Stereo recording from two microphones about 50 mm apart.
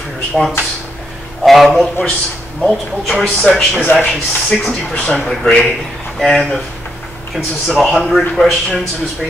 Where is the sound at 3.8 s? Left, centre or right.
Left.